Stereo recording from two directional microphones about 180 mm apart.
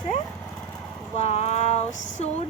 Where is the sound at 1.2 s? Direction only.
35° left (ahead or behind).